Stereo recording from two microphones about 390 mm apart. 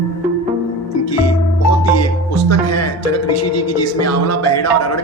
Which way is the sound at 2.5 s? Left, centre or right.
Left.